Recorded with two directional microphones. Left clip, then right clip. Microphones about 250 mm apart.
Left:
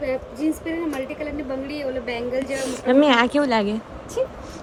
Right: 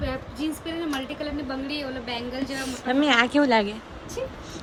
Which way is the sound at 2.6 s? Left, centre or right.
Centre.